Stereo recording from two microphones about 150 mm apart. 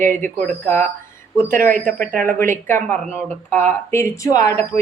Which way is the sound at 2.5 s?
15° left (ahead or behind).